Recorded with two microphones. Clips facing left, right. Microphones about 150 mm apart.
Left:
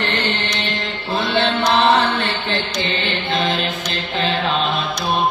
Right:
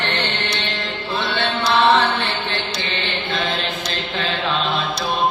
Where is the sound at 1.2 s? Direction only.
40° left (ahead or behind).